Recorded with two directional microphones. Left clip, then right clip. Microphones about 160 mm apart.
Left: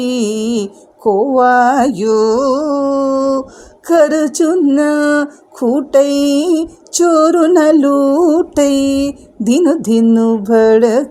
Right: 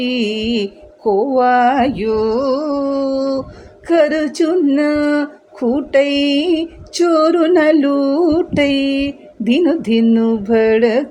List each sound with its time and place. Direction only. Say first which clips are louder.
0.0 s music: left 2 dB; 45° left (ahead or behind)
3.8 s speech: left 3 dB; 45° left (ahead or behind)